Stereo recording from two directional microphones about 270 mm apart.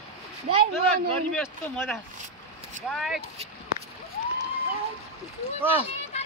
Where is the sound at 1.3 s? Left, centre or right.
Centre.